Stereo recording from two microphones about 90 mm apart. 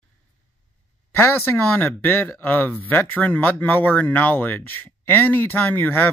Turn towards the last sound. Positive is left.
turn(degrees=20)  # may be behind; listen again after turning